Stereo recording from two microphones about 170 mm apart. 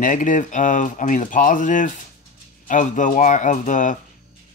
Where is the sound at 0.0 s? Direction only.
50° left (ahead or behind).